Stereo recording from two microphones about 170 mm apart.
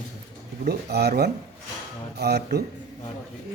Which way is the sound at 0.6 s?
70° right (ahead or behind).